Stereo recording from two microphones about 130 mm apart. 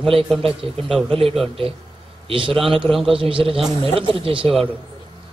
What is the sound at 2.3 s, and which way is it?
Speech, 40° right (ahead or behind).